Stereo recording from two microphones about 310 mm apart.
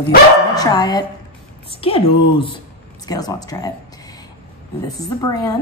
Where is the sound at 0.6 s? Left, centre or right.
Centre.